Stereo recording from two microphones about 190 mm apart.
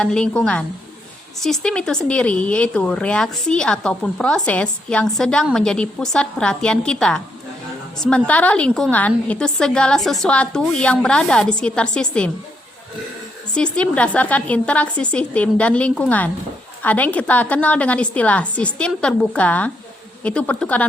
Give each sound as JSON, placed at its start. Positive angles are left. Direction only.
{"t": 0.0, "sound": "a woman's voice", "side_deg": 5}
{"t": 13.7, "sound": "a woman's voice", "side_deg": 5}